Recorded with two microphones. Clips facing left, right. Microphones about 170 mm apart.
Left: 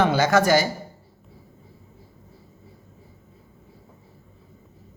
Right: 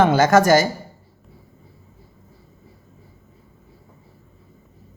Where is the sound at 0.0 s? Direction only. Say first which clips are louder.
Right 4 dB; 45° right (ahead or behind).